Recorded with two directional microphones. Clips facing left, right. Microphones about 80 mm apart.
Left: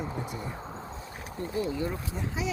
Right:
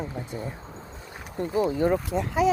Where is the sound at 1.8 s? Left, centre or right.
Right.